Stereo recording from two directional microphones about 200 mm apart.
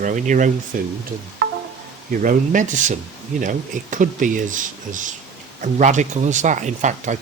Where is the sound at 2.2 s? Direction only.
40° right (ahead or behind).